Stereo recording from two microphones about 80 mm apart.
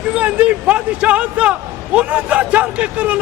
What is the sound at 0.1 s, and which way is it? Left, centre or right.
Speech, centre.